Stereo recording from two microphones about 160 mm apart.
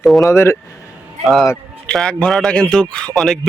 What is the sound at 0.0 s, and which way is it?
Speech, centre (ahead or behind).